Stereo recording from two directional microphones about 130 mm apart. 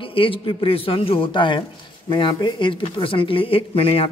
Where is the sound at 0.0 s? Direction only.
45° left (ahead or behind).